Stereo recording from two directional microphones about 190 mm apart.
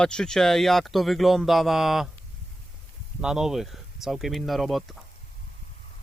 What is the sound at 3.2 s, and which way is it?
Speech, 5° right (ahead or behind).